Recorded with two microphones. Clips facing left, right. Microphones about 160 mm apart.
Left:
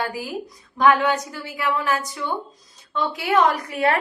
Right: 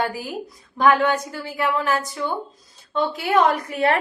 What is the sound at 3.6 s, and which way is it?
Speech, 30° right (ahead or behind).